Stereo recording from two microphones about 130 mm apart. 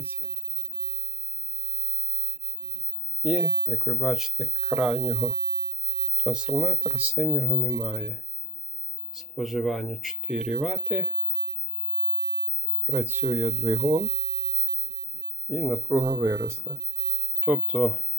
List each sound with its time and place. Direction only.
3.2 s speech: 5° right (ahead or behind)
9.1 s speech: centre (ahead or behind)
12.9 s speech: 15° right (ahead or behind)
15.4 s speech: 15° right (ahead or behind)